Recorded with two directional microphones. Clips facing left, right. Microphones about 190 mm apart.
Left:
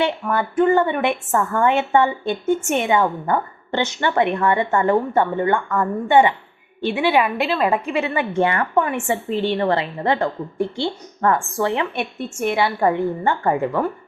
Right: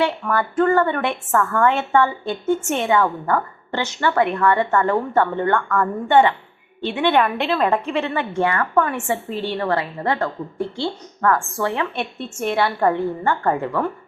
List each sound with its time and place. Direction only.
0.0 s a woman's voice: 20° left (ahead or behind)